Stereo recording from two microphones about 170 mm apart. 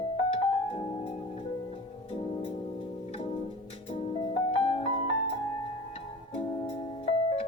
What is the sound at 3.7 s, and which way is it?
Music, 30° left (ahead or behind).